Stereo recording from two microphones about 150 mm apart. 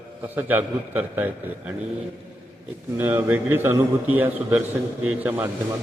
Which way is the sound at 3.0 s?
15° right (ahead or behind).